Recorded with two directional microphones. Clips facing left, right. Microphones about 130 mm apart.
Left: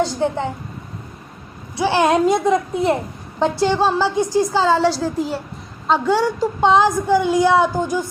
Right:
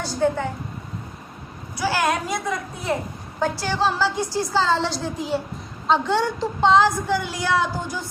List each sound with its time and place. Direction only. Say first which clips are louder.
0.0 s a child's voice: left 3 dB; 20° left (ahead or behind)
1.7 s a child's voice: left 6 dB; 25° left (ahead or behind)